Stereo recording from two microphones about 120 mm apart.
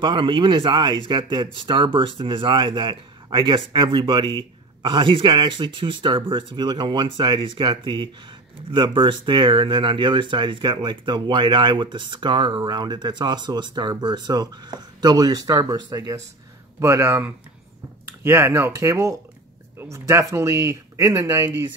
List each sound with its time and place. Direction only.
0.0 s speech: 40° right (ahead or behind); by 21.5 s 25° right (ahead or behind)